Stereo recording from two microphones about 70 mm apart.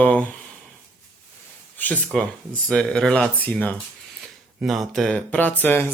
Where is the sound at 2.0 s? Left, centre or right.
Centre.